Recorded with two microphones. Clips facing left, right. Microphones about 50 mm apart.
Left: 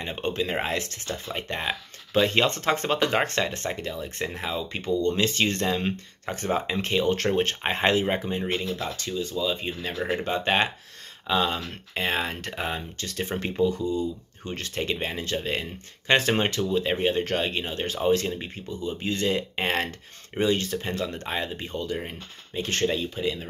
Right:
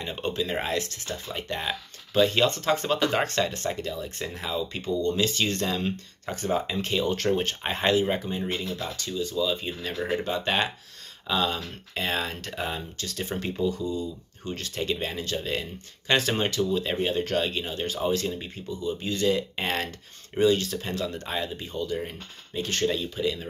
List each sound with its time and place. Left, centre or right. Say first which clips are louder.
0.0 s speech: left 1 dB; left
4.8 s speech: left 2 dB; left
5.4 s speech: left 2 dB; left
6.3 s speech: even; left
6.7 s speech: left 2 dB; left
14.8 s speech: left 1 dB; left
21.9 s speech: right 1 dB; left